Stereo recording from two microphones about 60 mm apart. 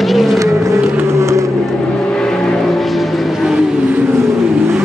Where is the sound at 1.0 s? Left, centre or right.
Right.